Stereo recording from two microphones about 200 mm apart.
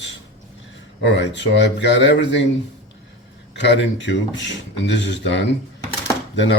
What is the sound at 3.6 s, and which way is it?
Speech, 65° left (ahead or behind).